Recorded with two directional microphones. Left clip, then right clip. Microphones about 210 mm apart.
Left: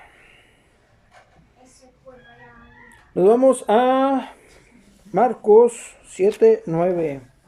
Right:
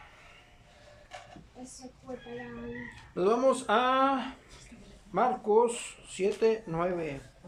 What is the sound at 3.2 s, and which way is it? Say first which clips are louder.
Speech: left 11 dB; 35° left (ahead or behind).